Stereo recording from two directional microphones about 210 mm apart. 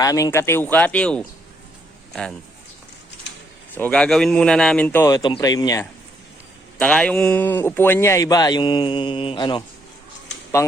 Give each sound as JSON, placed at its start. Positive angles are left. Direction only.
{"t": 0.0, "sound": "speech", "side_deg": 15}
{"t": 3.8, "sound": "speech", "side_deg": 5}
{"t": 6.7, "sound": "speech", "side_deg": 5}